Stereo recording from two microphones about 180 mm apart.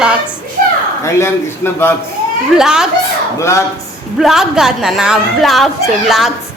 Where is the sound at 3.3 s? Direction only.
15° left (ahead or behind).